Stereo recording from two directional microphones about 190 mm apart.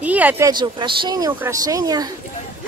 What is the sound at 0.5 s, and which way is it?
Speech, 25° right (ahead or behind).